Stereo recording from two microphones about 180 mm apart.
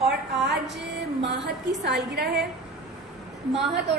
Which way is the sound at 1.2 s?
75° right (ahead or behind).